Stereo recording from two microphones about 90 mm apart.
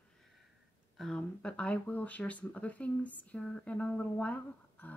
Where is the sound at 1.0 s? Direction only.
10° left (ahead or behind).